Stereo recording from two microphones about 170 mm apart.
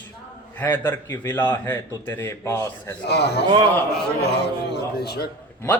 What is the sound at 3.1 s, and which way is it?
Speech, 75° left (ahead or behind).